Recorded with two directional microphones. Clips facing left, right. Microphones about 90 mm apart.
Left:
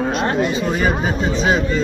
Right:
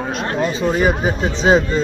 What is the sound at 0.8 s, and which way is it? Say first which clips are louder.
Speech: right 1 dB; 20° right (ahead or behind).